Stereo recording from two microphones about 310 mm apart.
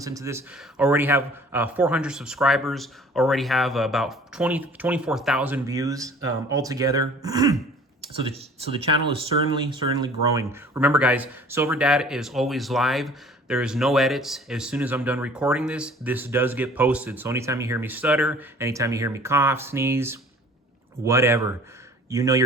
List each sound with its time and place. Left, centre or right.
0.0 s speech: centre